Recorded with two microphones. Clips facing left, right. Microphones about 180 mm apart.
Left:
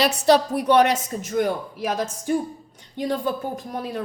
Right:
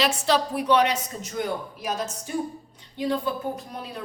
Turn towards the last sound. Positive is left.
turn(degrees=50)  # may be behind; listen again after turning